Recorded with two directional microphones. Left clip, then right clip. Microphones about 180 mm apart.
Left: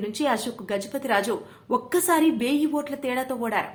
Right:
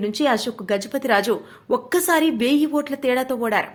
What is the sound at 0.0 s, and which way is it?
A woman's voice, 30° right (ahead or behind).